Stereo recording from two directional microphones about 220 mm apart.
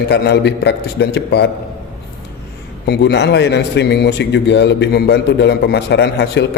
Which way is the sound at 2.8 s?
50° left (ahead or behind).